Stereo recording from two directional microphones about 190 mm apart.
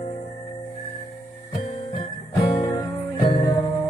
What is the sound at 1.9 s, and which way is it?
Music, 25° left (ahead or behind).